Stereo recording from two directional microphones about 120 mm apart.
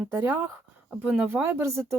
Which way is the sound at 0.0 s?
15° right (ahead or behind).